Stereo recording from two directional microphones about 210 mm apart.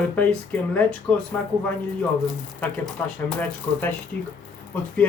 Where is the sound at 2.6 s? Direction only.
10° left (ahead or behind).